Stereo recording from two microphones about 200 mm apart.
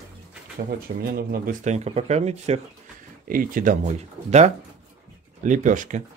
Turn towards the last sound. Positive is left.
turn(degrees=-40)  # may be behind; listen again after turning